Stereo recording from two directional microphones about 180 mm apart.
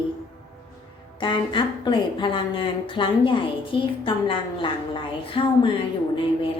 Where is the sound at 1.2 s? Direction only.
25° left (ahead or behind).